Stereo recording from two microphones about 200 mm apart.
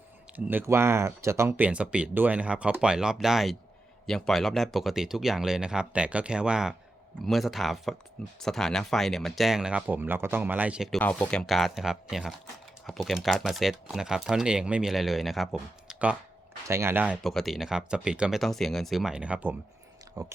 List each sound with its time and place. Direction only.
0.3 s speech: 10° right (ahead or behind)
11.0 s speech: 5° left (ahead or behind); by 20.3 s 15° right (ahead or behind)